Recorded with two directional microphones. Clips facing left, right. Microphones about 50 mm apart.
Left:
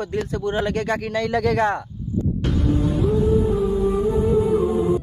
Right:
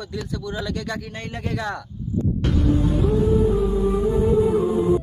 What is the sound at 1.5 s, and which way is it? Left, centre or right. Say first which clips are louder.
Speech: left 7 dB; left.